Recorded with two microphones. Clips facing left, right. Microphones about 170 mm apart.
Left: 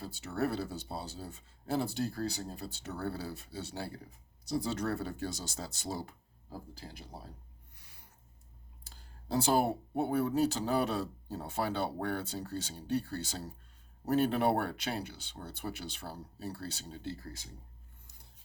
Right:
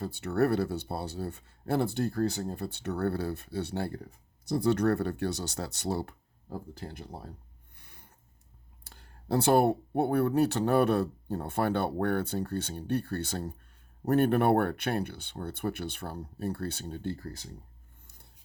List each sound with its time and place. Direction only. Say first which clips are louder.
0.0 s speech: right 7 dB; 60° right (ahead or behind)
7.8 s a sound: right 6 dB; 60° right (ahead or behind)
8.8 s speech: right 3 dB; 65° right (ahead or behind)